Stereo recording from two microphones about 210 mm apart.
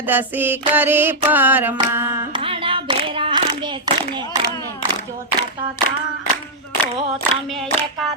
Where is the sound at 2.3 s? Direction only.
25° right (ahead or behind).